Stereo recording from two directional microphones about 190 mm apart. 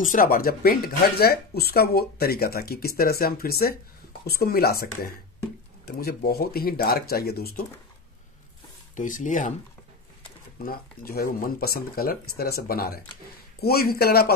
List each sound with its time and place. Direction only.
0.0 s speech: 45° left (ahead or behind)
8.9 s speech: 40° left (ahead or behind)
10.6 s speech: 50° left (ahead or behind)